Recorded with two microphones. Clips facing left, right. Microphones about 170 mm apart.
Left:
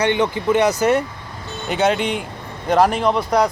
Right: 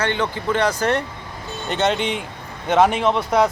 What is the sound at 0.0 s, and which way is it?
Speech, 15° left (ahead or behind).